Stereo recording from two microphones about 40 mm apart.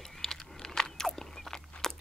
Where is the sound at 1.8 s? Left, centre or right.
Centre.